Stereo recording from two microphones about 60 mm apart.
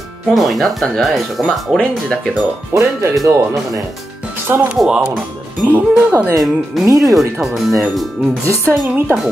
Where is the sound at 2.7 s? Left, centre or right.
Right.